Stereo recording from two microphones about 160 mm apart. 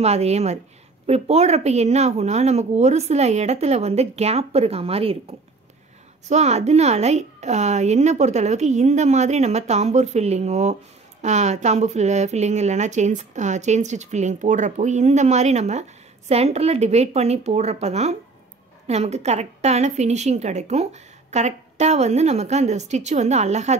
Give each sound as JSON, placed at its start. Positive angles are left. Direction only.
{"t": 0.0, "sound": "a woman's voice", "side_deg": -40}
{"t": 6.2, "sound": "a woman's voice", "side_deg": -45}